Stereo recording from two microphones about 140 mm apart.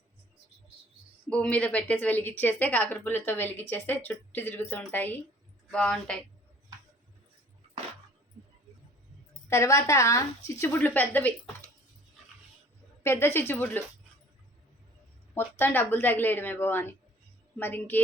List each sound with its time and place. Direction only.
1.3 s a woman's voice: 10° left (ahead or behind)
9.5 s a woman's voice: 20° left (ahead or behind)
13.0 s a woman's voice: 20° left (ahead or behind)
15.4 s a woman's voice: 15° left (ahead or behind)